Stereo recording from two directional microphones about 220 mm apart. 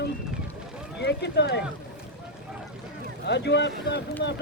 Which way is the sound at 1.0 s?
50° left (ahead or behind).